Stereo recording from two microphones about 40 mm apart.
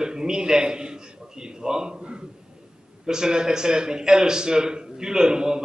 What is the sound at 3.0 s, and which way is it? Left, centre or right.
A man's voice, centre.